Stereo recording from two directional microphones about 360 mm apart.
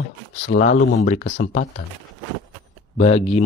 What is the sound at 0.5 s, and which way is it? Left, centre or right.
Speech, centre.